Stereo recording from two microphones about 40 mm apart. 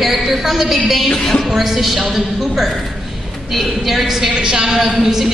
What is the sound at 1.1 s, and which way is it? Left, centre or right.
Speech, centre.